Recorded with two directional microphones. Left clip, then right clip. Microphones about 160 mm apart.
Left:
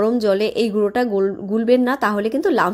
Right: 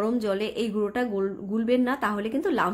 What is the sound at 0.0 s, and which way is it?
Speech, 30° left (ahead or behind).